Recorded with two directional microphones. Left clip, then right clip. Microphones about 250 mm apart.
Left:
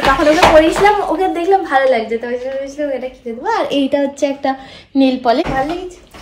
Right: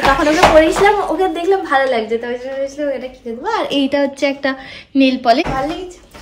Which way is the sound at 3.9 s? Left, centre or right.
Right.